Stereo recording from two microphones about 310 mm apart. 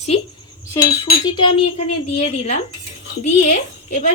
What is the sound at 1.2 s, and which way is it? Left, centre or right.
Speech, centre.